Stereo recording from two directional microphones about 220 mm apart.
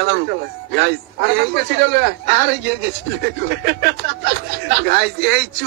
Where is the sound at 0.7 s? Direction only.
50° right (ahead or behind).